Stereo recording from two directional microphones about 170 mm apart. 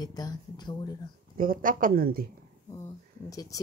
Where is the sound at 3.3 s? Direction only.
20° left (ahead or behind).